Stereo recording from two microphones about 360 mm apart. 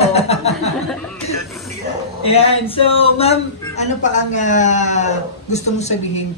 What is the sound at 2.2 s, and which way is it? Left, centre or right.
A man's voice, centre.